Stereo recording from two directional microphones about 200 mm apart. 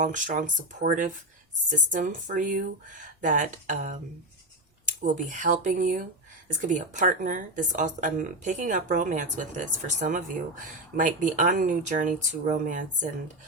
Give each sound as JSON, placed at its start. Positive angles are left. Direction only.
{"t": 0.0, "sound": "speech", "side_deg": -40}
{"t": 5.0, "sound": "speech", "side_deg": -40}